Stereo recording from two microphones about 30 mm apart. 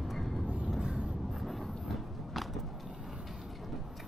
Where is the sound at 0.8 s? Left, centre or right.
Right.